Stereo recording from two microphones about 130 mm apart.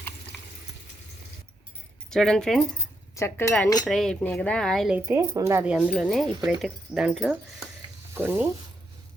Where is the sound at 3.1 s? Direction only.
20° left (ahead or behind).